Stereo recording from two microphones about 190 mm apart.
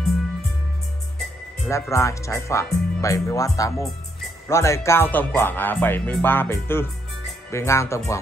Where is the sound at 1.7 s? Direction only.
15° left (ahead or behind).